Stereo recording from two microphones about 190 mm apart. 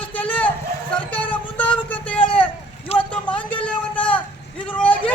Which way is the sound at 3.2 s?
5° left (ahead or behind).